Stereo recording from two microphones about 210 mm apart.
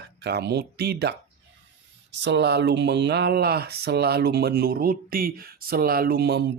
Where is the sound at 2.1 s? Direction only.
55° right (ahead or behind).